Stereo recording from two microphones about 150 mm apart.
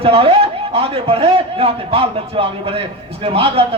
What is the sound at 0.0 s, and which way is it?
A man's voice, 40° right (ahead or behind).